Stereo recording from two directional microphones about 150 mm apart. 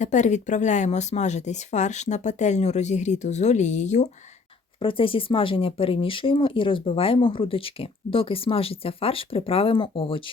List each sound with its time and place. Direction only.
0.0 s speech: 55° left (ahead or behind)
4.8 s speech: 35° left (ahead or behind)